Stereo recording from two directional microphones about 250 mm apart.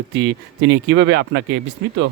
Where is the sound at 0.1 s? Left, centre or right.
Right.